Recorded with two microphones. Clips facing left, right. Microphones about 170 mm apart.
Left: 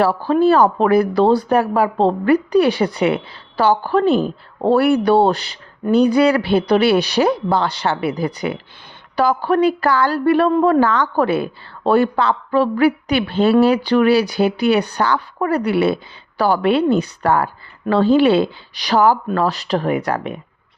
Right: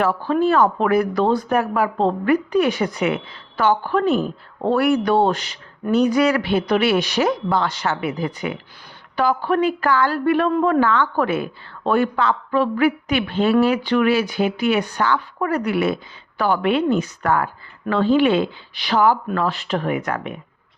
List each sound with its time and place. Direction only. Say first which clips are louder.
0.0 s a woman's voice: left 4 dB; 35° left (ahead or behind)